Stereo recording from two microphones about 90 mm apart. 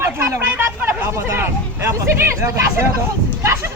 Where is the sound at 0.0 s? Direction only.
25° right (ahead or behind).